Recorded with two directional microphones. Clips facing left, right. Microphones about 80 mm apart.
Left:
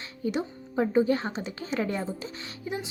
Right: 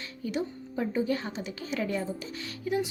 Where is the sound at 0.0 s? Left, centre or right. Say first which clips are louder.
Left 2 dB; left.